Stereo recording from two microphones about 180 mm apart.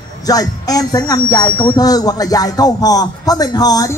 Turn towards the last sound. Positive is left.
turn(degrees=20)  # may be behind; listen again after turning